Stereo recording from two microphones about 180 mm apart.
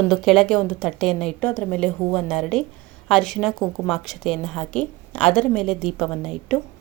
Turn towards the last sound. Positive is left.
turn(degrees=0)  # may be behind; listen again after turning